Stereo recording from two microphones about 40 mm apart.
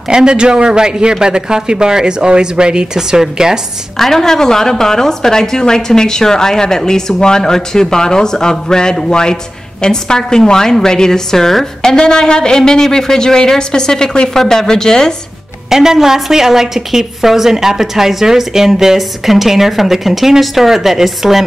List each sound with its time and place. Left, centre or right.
0.1 s a man's voice: right
3.9 s a woman's voice: centre
15.7 s a woman's voice: centre